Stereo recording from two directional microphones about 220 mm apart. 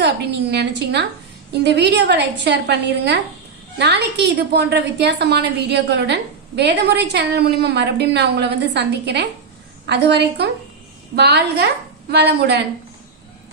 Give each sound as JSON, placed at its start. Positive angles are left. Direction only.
{"t": 0.0, "sound": "a woman's voice", "side_deg": -50}